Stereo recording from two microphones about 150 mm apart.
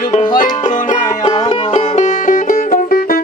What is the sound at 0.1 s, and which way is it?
Music, 35° left (ahead or behind).